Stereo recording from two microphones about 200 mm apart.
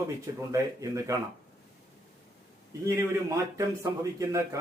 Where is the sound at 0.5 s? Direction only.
15° right (ahead or behind).